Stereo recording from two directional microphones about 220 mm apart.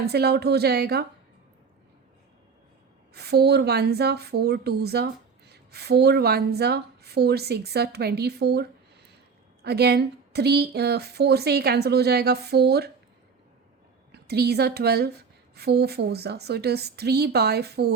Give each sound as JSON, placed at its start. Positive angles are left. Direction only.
{"t": 0.0, "sound": "speech", "side_deg": -45}
{"t": 3.2, "sound": "speech", "side_deg": -45}
{"t": 9.6, "sound": "speech", "side_deg": -45}
{"t": 14.1, "sound": "a woman's voice", "side_deg": -45}